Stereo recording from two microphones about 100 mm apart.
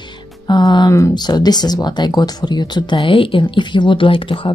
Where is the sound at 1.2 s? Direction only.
45° left (ahead or behind); by 4.5 s 60° left (ahead or behind).